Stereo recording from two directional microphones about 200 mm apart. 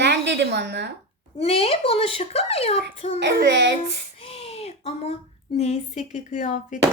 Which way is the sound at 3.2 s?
55° right (ahead or behind).